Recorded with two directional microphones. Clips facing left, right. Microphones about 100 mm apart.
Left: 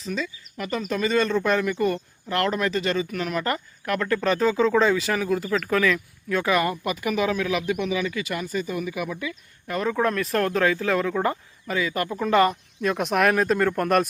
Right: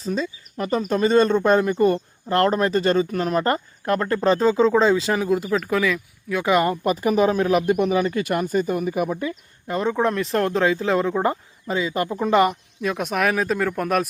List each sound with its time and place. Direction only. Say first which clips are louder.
0.0 s speech: right 4 dB; 35° right (ahead or behind)
5.4 s speech: right 1 dB; 10° right (ahead or behind)
6.4 s speech: right 5 dB; 25° right (ahead or behind)
9.6 s speech: right 2 dB; 25° right (ahead or behind)
12.8 s speech: left 1 dB; centre (ahead or behind)